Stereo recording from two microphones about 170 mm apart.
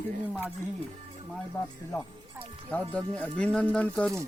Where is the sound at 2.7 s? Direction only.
10° left (ahead or behind).